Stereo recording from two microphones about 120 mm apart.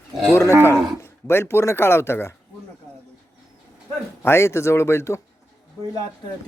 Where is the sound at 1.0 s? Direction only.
20° left (ahead or behind).